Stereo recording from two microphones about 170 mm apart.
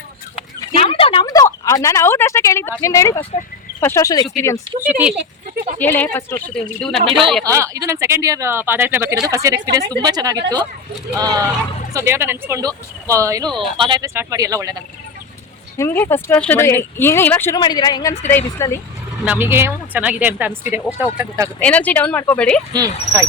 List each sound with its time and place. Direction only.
0.6 s a sound: 30° left (ahead or behind); by 2.7 s 15° left (ahead or behind)
2.8 s speech: 20° left (ahead or behind)
4.8 s speech: 10° right (ahead or behind)
5.8 s speech: 10° left (ahead or behind)
7.4 s speech: 20° right (ahead or behind)
15.8 s speech: 15° left (ahead or behind)
17.6 s a woman's voice: 25° left (ahead or behind)
18.2 s speech: 15° left (ahead or behind)
19.2 s speech: 10° right (ahead or behind)
21.6 s speech: 10° left (ahead or behind)
22.7 s speech: 20° right (ahead or behind)